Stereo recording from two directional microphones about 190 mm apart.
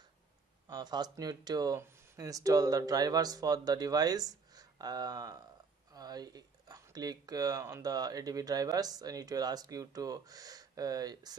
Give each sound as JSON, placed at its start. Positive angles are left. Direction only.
{"t": 0.7, "sound": "speech", "side_deg": -20}